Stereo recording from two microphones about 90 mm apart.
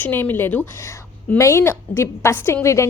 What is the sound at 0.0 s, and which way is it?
A woman's voice, 20° left (ahead or behind).